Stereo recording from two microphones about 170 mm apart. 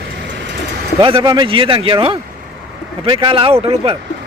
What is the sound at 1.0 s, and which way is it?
A man's voice, 30° right (ahead or behind).